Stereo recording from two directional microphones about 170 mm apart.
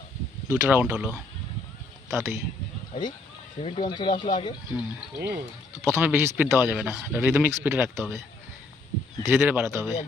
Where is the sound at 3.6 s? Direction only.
30° left (ahead or behind).